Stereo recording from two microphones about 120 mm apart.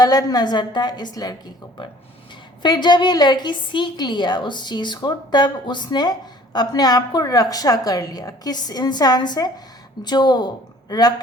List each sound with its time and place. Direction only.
0.0 s a woman's voice: 30° left (ahead or behind)
2.6 s a woman's voice: 40° left (ahead or behind)